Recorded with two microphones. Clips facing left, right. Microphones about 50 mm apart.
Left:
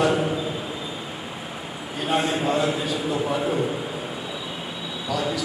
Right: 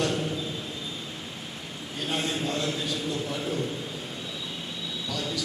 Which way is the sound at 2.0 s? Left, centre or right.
Centre.